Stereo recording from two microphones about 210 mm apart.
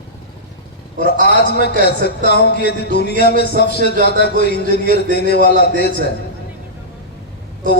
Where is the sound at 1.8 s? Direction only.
50° left (ahead or behind).